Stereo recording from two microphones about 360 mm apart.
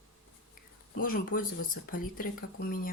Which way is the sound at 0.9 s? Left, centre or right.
Left.